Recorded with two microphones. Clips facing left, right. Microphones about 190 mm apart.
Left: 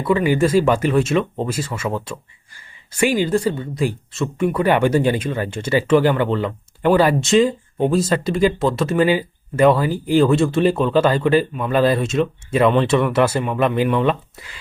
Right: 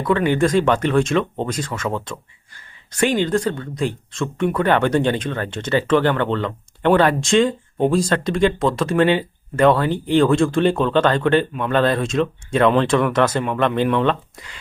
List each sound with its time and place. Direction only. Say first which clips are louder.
0.0 s speech: left 1 dB; 5° left (ahead or behind)